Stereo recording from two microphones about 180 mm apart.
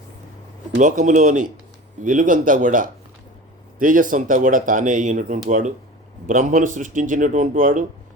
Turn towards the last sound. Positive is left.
turn(degrees=-50)  # may be behind; listen again after turning